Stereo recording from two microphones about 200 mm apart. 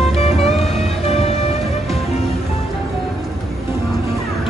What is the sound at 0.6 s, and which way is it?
Music, 30° left (ahead or behind).